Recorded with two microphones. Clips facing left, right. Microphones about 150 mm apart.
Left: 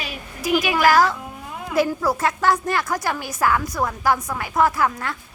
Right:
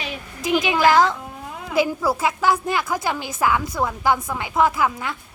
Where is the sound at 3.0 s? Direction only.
20° right (ahead or behind).